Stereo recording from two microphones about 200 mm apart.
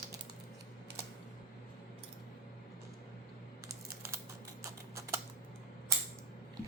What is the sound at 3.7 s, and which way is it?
Computer keyboard, 15° right (ahead or behind).